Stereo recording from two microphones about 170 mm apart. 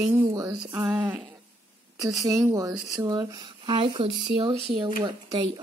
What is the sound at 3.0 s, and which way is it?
Speech, 20° right (ahead or behind).